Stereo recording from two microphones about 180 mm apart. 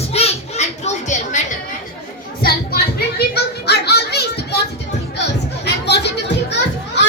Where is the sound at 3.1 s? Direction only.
65° left (ahead or behind).